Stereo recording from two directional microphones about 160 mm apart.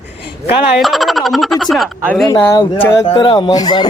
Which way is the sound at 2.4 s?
20° left (ahead or behind).